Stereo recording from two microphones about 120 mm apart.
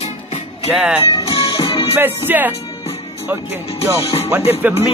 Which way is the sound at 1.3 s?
40° left (ahead or behind).